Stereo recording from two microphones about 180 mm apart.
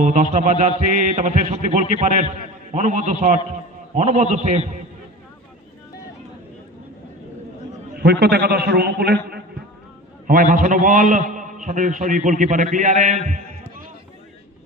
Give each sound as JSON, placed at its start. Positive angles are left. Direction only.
{"t": 0.0, "sound": "a man's voice", "side_deg": -45}
{"t": 7.9, "sound": "a man's voice", "side_deg": -60}
{"t": 10.2, "sound": "a man's voice", "side_deg": -50}